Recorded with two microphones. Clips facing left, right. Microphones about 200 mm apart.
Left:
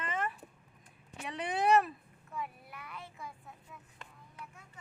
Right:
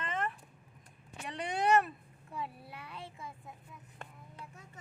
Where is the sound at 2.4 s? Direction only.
30° right (ahead or behind).